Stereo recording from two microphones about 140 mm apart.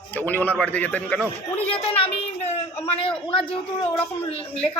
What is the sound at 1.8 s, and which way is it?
Speech, 40° left (ahead or behind).